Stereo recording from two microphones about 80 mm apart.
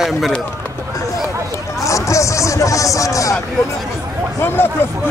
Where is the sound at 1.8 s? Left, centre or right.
Left.